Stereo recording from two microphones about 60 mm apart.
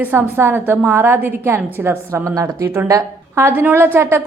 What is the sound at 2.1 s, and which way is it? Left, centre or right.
Speech, right.